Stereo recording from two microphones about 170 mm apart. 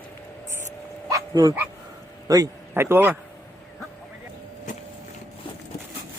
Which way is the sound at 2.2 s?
20° right (ahead or behind).